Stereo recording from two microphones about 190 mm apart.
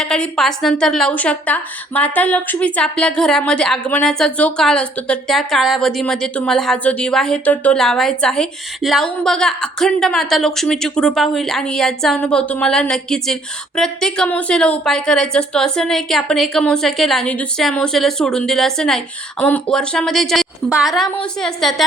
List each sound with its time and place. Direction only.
0.0 s a woman's voice: 5° left (ahead or behind)